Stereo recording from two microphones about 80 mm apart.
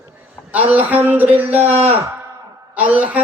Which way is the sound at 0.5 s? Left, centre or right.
Right.